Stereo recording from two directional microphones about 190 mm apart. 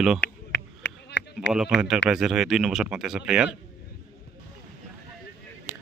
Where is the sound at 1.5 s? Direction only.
5° right (ahead or behind).